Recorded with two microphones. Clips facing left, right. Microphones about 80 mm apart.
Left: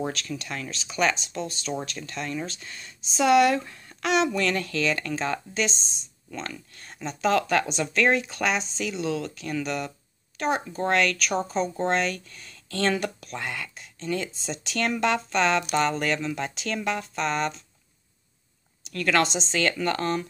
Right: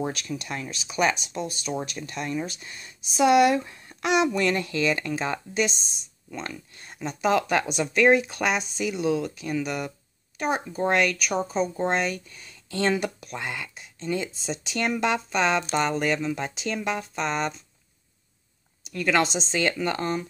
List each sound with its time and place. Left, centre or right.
0.1 s speech: centre
18.9 s speech: centre